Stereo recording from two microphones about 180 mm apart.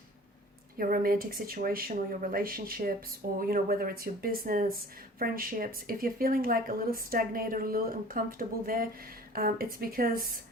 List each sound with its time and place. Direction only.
0.8 s speech: 55° right (ahead or behind)